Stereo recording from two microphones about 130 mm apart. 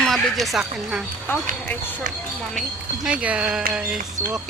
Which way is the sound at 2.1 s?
85° right.